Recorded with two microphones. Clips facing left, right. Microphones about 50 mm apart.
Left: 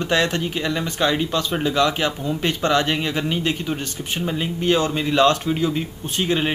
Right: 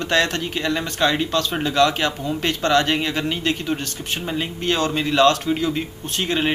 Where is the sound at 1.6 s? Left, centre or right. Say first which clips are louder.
Right 2 dB; centre.